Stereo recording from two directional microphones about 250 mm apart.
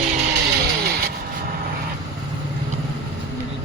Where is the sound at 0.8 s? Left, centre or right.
Right.